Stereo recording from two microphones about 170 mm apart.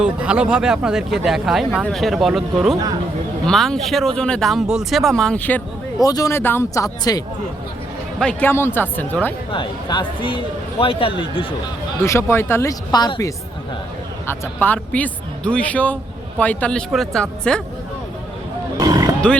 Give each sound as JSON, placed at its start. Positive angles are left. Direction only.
{"t": 0.0, "sound": "speech", "side_deg": -5}
{"t": 6.0, "sound": "speech", "side_deg": 20}
{"t": 8.2, "sound": "speech", "side_deg": 10}
{"t": 9.5, "sound": "speech", "side_deg": 30}
{"t": 12.0, "sound": "speech", "side_deg": 15}
{"t": 14.3, "sound": "speech", "side_deg": 10}
{"t": 18.8, "sound": "roaring cats", "side_deg": -20}